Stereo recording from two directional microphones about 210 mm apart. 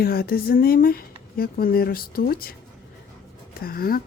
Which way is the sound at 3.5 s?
45° left (ahead or behind).